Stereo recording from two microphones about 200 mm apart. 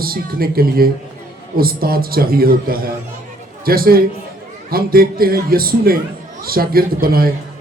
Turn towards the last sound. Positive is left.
turn(degrees=-45)  # may be behind; listen again after turning